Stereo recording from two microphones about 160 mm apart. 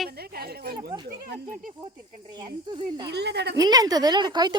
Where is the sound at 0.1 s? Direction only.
75° right (ahead or behind).